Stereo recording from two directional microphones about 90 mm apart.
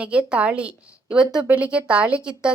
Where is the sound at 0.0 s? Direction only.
15° right (ahead or behind).